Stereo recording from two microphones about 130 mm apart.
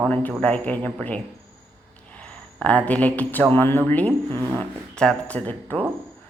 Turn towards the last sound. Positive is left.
turn(degrees=10)  # may be behind; listen again after turning